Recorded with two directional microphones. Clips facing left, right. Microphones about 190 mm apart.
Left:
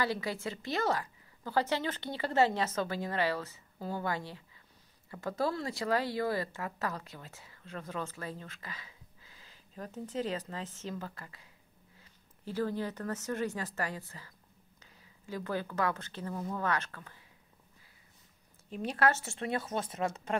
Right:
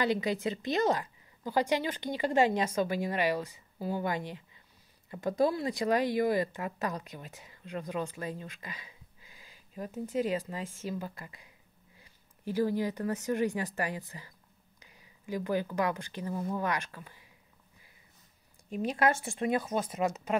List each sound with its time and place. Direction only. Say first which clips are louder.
0.0 s speech: right 4 dB; 20° right (ahead or behind)
18.7 s speech: right 2 dB; 10° right (ahead or behind)